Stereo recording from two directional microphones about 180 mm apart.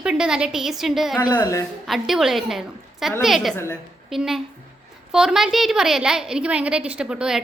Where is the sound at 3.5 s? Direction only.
10° left (ahead or behind).